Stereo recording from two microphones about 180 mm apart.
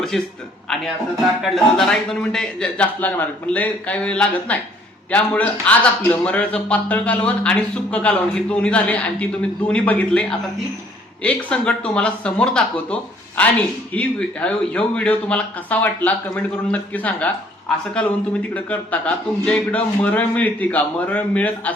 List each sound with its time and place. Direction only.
0.1 s a man's voice: centre (ahead or behind)
1.4 s a man's voice: centre (ahead or behind)
18.5 s speech: 10° left (ahead or behind)